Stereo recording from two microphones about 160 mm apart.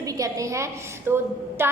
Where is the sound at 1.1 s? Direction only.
15° right (ahead or behind).